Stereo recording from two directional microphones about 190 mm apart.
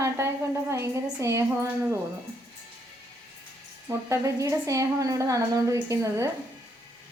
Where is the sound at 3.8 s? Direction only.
15° right (ahead or behind).